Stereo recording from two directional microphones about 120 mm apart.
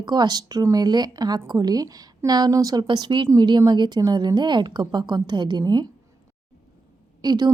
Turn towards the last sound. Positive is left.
turn(degrees=-35)  # may be behind; listen again after turning